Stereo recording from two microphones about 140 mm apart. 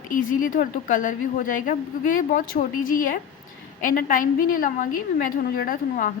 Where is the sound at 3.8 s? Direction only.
80° left.